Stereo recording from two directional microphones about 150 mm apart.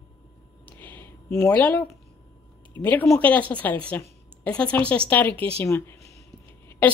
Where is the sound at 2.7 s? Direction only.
15° left (ahead or behind).